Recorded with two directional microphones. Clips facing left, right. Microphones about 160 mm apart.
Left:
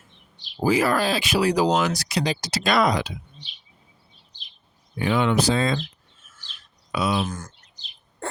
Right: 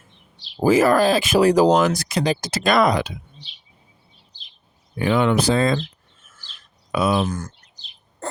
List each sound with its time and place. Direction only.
0.3 s speech: 45° right (ahead or behind)
4.9 s speech: 50° right (ahead or behind)
6.9 s speech: 50° right (ahead or behind)